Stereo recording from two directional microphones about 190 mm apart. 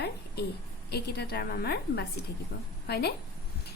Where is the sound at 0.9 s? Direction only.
60° left (ahead or behind).